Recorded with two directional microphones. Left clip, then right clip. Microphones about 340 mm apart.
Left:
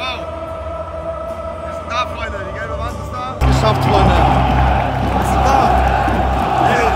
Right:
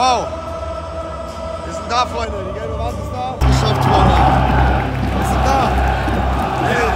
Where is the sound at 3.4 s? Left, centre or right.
Centre.